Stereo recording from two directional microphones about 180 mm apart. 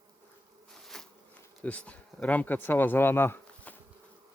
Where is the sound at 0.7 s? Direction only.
5° left (ahead or behind).